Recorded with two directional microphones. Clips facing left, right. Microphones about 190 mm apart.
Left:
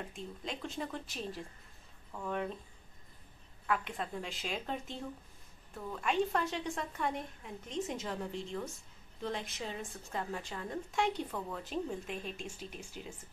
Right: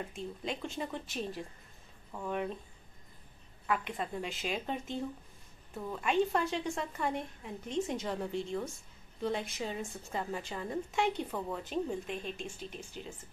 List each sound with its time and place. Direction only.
0.1 s a woman's voice: centre (ahead or behind)
3.6 s a woman's voice: 5° right (ahead or behind)
6.0 s a woman's voice: centre (ahead or behind)